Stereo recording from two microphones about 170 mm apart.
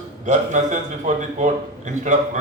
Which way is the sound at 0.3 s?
45° right (ahead or behind).